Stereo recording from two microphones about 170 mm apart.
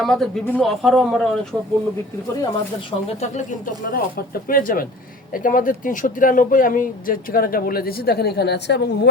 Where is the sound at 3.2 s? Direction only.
45° left (ahead or behind).